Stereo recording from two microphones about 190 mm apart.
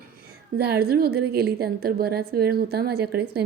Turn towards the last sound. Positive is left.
turn(degrees=-55)  # may be behind; listen again after turning